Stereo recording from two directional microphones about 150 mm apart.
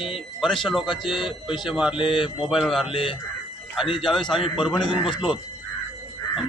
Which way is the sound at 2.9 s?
35° left (ahead or behind).